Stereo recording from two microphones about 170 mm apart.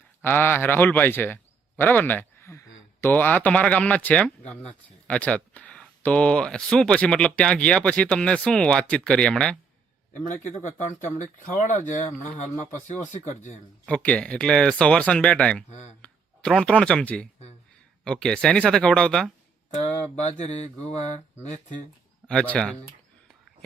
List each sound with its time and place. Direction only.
0.2 s a man's voice: 10° left (ahead or behind)
10.1 s speech: 45° left (ahead or behind)
11.5 s speech: 50° left (ahead or behind)
13.8 s speech: 5° left (ahead or behind)
19.8 s a sound: 40° left (ahead or behind)
22.3 s speech: 5° left (ahead or behind)